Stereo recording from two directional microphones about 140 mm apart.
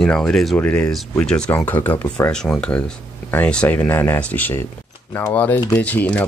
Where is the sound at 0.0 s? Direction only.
5° left (ahead or behind).